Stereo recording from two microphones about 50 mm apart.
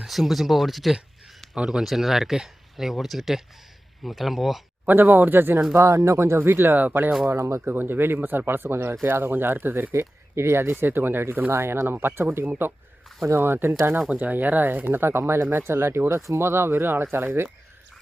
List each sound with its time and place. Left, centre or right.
0.0 s speech: centre
1.5 s speech: centre
4.9 s speech: right
5.7 s speech: right
6.5 s speech: right
6.7 s speech: right
7.3 s speech: right
7.6 s speech: right
9.9 s speech: right
11.5 s speech: right
14.2 s speech: right
16.5 s speech: right